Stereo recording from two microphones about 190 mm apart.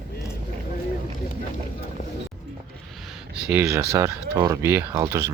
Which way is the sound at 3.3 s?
5° right (ahead or behind).